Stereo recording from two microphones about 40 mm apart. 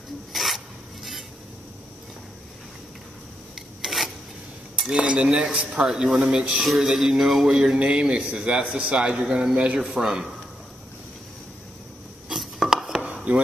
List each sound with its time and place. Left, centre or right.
0.3 s a sound: centre
3.5 s filing: centre
4.7 s a man's voice: right
6.6 s a man's voice: centre
12.3 s a sound: centre
12.6 s dishes: centre
13.0 s dishes: right